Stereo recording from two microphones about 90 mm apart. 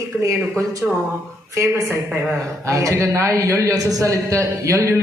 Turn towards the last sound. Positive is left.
turn(degrees=-35)  # may be behind; listen again after turning